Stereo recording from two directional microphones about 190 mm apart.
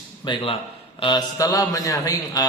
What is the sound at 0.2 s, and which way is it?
A man's voice, 25° left (ahead or behind).